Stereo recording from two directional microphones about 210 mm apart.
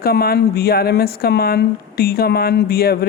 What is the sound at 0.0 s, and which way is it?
Speech, 45° left (ahead or behind).